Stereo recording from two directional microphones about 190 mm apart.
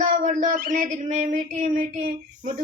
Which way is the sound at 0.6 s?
45° right (ahead or behind).